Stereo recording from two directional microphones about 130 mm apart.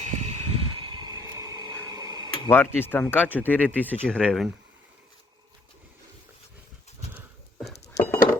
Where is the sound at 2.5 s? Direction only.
15° left (ahead or behind).